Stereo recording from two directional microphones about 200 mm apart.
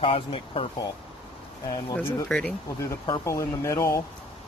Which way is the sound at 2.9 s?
15° left (ahead or behind).